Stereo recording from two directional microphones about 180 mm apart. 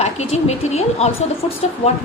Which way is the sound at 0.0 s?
35° left (ahead or behind).